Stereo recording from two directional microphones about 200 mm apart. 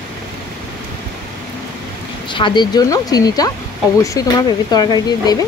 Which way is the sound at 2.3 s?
25° left (ahead or behind).